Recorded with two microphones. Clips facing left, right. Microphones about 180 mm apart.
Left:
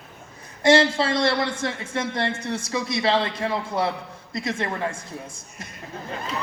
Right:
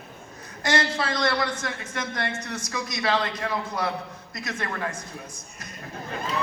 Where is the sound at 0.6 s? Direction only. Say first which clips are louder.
Left 8 dB; 25° left (ahead or behind).